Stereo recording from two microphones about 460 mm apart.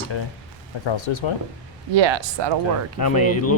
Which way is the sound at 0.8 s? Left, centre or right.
Left.